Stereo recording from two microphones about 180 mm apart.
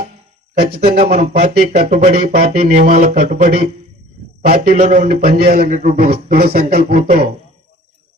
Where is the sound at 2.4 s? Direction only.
40° right (ahead or behind).